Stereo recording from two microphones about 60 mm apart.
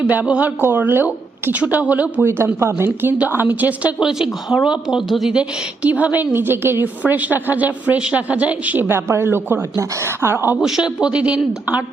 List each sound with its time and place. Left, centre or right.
0.3 s a man's voice: right
0.6 s a woman's voice: right
1.0 s a woman's voice: right
2.6 s a woman's voice: right
4.0 s a man's voice: centre
5.3 s a man's voice: centre
6.3 s a woman's voice: right
7.0 s a man's voice: right
8.9 s a woman's voice: right
10.6 s a man's voice: centre